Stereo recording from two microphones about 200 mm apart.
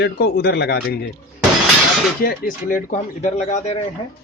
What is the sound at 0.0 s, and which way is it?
Speech, 55° left (ahead or behind).